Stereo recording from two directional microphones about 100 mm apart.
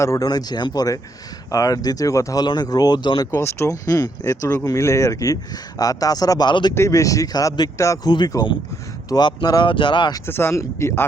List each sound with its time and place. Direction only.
0.0 s speech: 30° left (ahead or behind)
0.3 s speech: 45° left (ahead or behind)
3.3 s speech: 30° left (ahead or behind)
6.5 s speech: 50° left (ahead or behind)
6.7 s speech: 30° left (ahead or behind); by 10.2 s 55° left (ahead or behind)
10.2 s speech: 25° left (ahead or behind)